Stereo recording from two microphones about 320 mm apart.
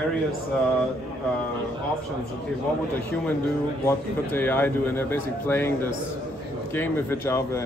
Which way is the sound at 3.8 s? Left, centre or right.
Centre.